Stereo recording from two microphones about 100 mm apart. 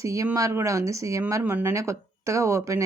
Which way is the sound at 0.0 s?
35° right (ahead or behind).